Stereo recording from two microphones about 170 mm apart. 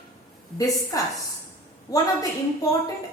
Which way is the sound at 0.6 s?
20° left (ahead or behind).